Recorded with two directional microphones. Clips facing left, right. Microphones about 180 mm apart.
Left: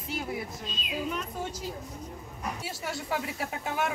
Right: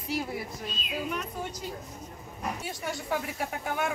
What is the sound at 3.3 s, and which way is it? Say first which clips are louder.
Speech: right 1 dB; centre (ahead or behind).